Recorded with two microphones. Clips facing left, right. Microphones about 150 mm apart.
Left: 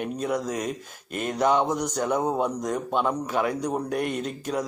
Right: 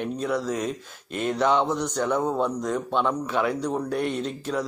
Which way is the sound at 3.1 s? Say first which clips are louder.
Right 1 dB; 45° left (ahead or behind).